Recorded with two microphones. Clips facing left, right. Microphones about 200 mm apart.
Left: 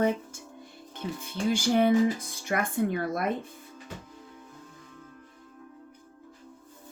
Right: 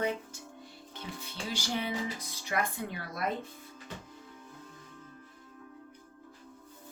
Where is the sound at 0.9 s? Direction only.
50° left (ahead or behind).